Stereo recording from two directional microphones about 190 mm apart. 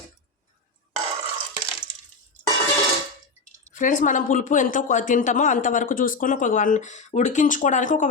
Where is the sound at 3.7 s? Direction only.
45° left (ahead or behind).